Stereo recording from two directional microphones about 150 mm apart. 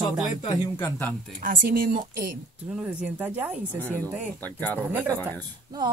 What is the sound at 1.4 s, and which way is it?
Speech, 65° right (ahead or behind).